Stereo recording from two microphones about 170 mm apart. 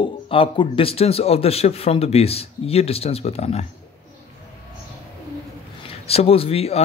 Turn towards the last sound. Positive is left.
turn(degrees=35)  # may be behind; listen again after turning